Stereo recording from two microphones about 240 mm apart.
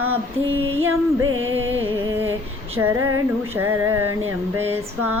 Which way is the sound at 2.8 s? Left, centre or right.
Centre.